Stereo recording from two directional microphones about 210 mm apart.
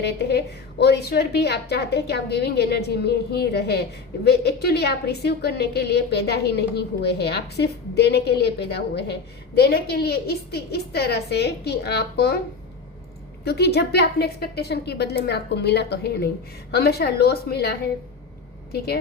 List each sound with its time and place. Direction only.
0.0 s a woman's voice: 50° left (ahead or behind)
13.4 s a woman's voice: 50° left (ahead or behind)